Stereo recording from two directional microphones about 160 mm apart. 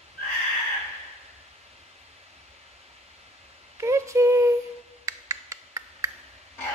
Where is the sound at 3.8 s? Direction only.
20° right (ahead or behind).